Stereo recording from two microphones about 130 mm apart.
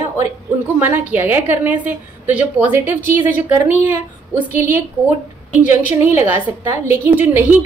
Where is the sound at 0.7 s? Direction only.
15° right (ahead or behind).